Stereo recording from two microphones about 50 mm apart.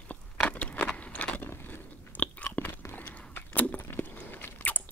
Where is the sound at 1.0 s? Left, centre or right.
Left.